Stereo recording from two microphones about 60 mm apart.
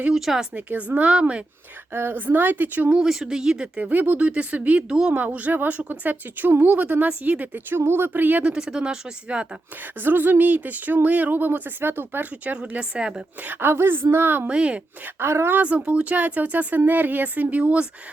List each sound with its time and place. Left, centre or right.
0.2 s a woman's voice: centre
0.5 s speech: right
1.9 s speech: right
2.9 s speech: centre
3.8 s speech: right
5.1 s speech: right
7.8 s speech: right; by 9.5 s centre
10.0 s speech: right
12.5 s speech: centre
13.4 s speech: right
14.4 s speech: centre
15.0 s speech: right
15.5 s speech: right